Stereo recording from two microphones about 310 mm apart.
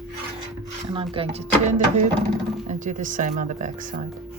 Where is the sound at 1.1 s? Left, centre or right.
Centre.